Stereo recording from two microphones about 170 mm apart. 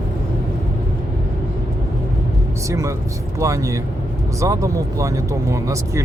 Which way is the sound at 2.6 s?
20° right (ahead or behind).